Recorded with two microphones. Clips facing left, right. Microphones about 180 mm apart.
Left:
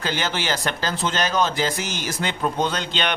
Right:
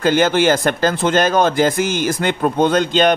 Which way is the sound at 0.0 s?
50° right (ahead or behind).